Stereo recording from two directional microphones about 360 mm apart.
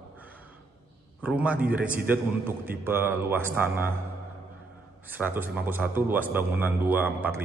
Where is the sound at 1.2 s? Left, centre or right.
Centre.